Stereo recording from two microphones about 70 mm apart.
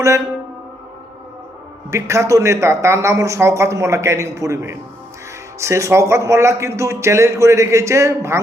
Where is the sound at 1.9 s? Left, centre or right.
Right.